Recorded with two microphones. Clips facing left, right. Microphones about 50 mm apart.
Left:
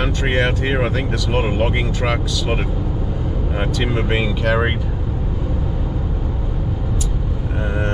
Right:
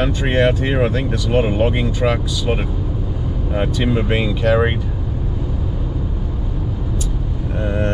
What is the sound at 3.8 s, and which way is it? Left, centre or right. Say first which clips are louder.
Speech: right 1 dB; centre.